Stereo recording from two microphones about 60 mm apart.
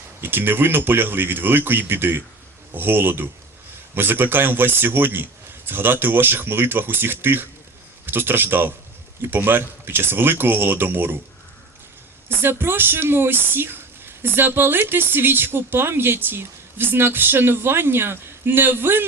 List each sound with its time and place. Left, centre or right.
0.2 s speech: right
12.3 s speech: right